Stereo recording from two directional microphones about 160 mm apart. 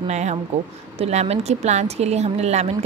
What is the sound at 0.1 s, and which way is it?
Speech, 45° right (ahead or behind).